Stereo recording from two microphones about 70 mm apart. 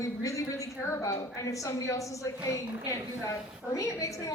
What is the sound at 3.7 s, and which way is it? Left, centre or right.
Speech, left.